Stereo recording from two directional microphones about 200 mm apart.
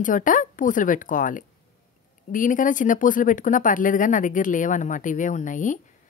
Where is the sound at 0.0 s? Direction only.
40° left (ahead or behind).